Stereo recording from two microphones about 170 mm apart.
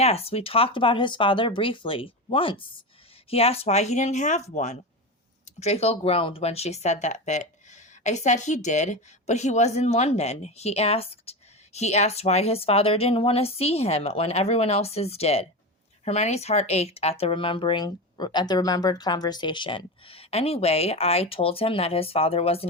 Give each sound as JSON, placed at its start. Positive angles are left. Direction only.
{"t": 0.0, "sound": "speech", "side_deg": 35}